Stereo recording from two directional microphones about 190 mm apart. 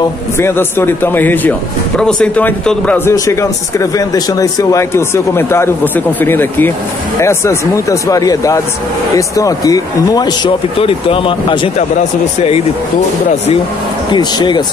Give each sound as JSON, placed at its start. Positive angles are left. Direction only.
{"t": 0.4, "sound": "speech", "side_deg": 10}
{"t": 14.1, "sound": "speech", "side_deg": 25}